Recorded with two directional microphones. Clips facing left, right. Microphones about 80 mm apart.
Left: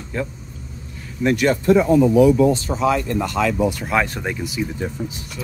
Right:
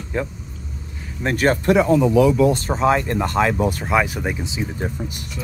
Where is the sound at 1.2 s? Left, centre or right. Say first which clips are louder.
Left 1 dB; right.